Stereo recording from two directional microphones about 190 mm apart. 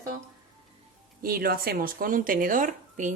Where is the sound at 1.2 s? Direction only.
50° right (ahead or behind).